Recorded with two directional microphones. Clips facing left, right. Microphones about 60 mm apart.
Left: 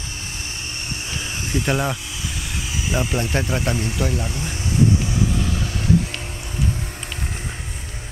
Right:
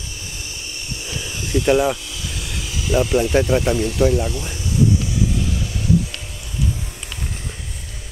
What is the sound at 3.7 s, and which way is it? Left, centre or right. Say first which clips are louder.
Speech: right 5 dB; left.